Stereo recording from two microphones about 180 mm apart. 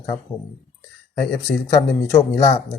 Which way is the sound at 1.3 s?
20° left (ahead or behind).